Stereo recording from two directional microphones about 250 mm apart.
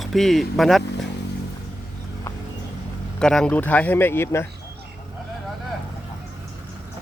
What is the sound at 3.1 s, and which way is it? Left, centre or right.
Speech, centre.